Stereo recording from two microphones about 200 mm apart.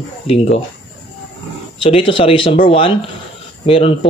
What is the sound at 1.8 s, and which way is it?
Speech, 25° left (ahead or behind).